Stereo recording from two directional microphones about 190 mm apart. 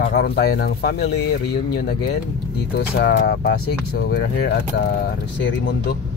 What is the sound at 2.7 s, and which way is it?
Speech, 55° left (ahead or behind).